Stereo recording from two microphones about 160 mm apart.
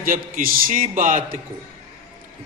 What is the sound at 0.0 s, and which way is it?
A man's voice, 60° right (ahead or behind).